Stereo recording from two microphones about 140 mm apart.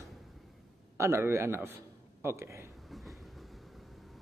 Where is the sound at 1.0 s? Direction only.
20° right (ahead or behind).